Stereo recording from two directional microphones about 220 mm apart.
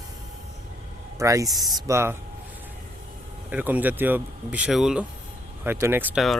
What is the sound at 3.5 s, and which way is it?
Speech, 10° right (ahead or behind).